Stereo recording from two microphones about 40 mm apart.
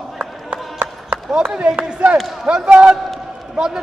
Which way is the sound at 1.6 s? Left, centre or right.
Right.